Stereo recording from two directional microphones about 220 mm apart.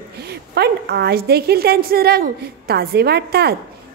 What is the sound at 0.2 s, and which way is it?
A woman's voice, 45° right (ahead or behind).